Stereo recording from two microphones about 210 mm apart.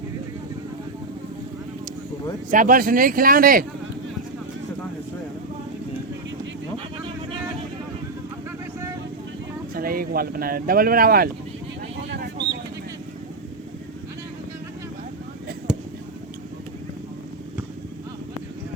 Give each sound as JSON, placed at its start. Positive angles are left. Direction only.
{"t": 2.5, "sound": "speech", "side_deg": -40}
{"t": 6.7, "sound": "vehicle", "side_deg": -25}
{"t": 9.7, "sound": "speech", "side_deg": -45}
{"t": 12.1, "sound": "a sound", "side_deg": -55}